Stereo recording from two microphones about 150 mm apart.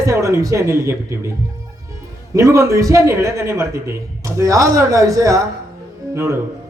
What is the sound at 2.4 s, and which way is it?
A man's voice, 20° right (ahead or behind).